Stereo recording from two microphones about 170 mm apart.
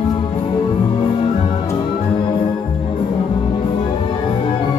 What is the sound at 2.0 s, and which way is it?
Organ, 30° left (ahead or behind).